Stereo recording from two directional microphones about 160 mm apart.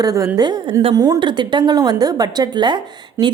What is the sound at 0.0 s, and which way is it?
A woman's voice, 20° right (ahead or behind).